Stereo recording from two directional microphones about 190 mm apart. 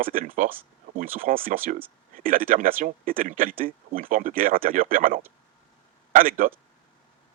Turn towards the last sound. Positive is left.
turn(degrees=-45)  # may be behind; listen again after turning